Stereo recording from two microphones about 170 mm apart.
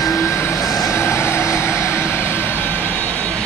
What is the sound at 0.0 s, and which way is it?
Vehicle, 15° left (ahead or behind).